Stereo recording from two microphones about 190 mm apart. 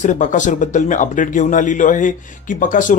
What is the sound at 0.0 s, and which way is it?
Speech, 40° left (ahead or behind).